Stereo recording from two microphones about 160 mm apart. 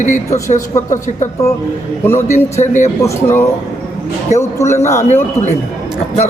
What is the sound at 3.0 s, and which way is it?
A man's voice, 15° left (ahead or behind).